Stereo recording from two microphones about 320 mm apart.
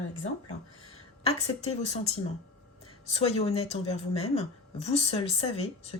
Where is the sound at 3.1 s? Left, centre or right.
Centre.